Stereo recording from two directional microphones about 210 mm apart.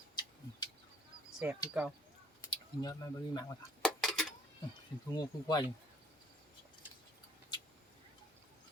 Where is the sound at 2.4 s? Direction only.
20° left (ahead or behind).